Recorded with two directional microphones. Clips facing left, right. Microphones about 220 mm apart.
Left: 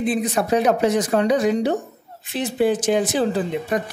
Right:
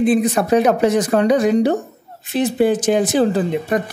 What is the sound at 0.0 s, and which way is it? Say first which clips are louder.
Speech: right 6 dB; 55° right (ahead or behind).